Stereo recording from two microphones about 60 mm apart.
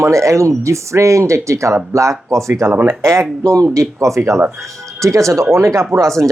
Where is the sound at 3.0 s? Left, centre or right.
Right.